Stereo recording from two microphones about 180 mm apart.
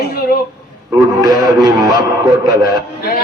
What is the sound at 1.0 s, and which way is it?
A man's voice, 20° right (ahead or behind).